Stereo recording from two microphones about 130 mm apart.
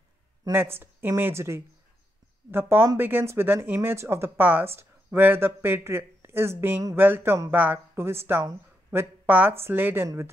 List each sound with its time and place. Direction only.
0.5 s a woman's voice: 20° right (ahead or behind)